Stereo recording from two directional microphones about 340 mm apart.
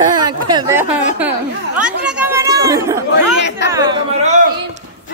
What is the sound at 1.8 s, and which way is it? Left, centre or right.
Chatter, centre.